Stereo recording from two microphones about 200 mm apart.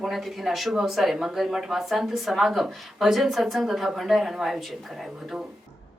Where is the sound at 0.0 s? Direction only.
Centre (ahead or behind).